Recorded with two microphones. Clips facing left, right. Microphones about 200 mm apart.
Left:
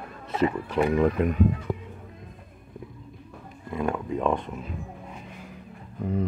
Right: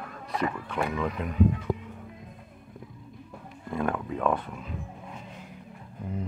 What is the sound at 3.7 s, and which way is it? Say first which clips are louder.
Speech: left 2 dB; 10° left (ahead or behind).